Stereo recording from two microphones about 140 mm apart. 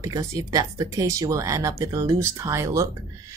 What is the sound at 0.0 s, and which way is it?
Speech, 25° right (ahead or behind).